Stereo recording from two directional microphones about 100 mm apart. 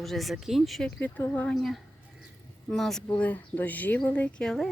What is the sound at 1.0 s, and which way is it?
Speech, 15° left (ahead or behind).